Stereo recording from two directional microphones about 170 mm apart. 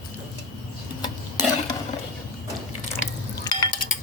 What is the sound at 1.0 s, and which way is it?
Stir, 25° left (ahead or behind).